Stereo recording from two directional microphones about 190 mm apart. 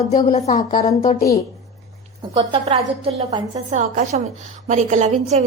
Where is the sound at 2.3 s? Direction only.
30° right (ahead or behind).